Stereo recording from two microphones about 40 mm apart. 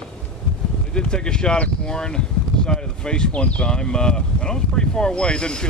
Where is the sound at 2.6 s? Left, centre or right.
Centre.